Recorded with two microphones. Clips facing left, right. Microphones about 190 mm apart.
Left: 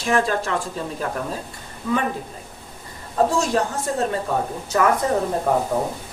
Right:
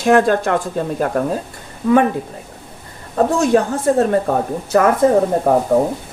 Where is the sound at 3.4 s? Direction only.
60° right (ahead or behind).